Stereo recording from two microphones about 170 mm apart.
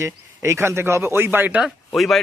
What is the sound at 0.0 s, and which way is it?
Speech, 15° right (ahead or behind).